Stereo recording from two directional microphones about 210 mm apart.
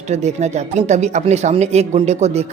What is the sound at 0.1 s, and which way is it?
Speech, 35° right (ahead or behind).